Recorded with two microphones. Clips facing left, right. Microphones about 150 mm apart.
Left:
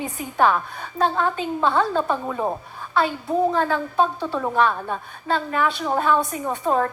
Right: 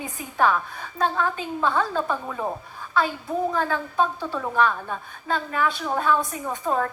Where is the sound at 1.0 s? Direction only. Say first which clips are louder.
Left 3 dB; 30° left (ahead or behind).